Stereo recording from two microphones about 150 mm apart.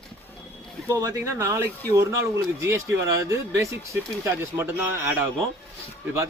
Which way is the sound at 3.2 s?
20° right (ahead or behind).